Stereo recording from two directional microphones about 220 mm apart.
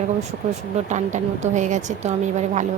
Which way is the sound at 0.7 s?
30° right (ahead or behind).